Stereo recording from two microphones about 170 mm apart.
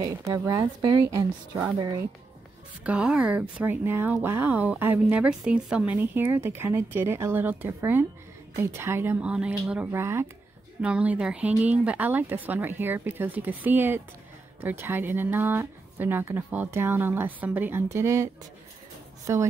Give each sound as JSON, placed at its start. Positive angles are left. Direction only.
{"t": 0.0, "sound": "a woman's voice", "side_deg": -20}
{"t": 2.8, "sound": "speech", "side_deg": -5}